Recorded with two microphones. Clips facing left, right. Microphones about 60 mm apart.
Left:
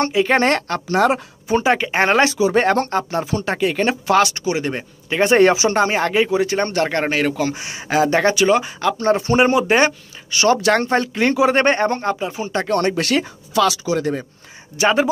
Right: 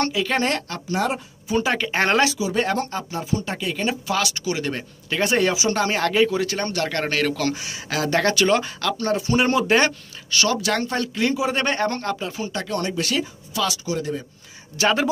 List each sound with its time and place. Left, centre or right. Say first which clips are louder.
0.0 s speech: left 6 dB; left
0.4 s speech: left 6 dB; left
0.8 s speech: left 7 dB; left
1.6 s speech: left 3 dB; left
2.3 s speech: left 7 dB; left
4.2 s speech: left 7 dB; left
5.3 s speech: left 9 dB; left
5.7 s speech: left 4 dB; left
10.5 s speech: left 7 dB; left
11.9 s speech: left 5 dB; left
12.5 s speech: left 8 dB; left
14.8 s speech: left 4 dB; centre